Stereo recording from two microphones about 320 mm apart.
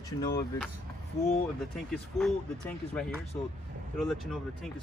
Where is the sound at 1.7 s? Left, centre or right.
Centre.